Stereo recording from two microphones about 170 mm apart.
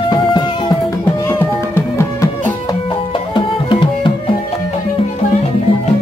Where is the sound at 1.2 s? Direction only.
15° left (ahead or behind).